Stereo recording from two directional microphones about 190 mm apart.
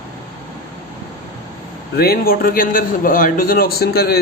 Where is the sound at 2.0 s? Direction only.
50° left (ahead or behind).